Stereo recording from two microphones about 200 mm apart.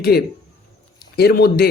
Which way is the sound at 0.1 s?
50° left (ahead or behind).